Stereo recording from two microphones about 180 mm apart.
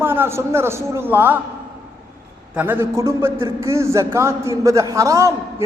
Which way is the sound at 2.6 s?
10° right (ahead or behind).